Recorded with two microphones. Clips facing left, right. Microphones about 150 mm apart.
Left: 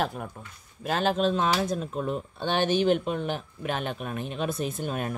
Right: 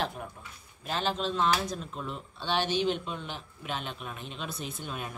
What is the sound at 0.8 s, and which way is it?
Speech, 50° left (ahead or behind).